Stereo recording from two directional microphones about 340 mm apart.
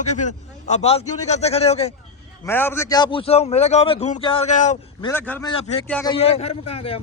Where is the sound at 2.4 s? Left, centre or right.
Centre.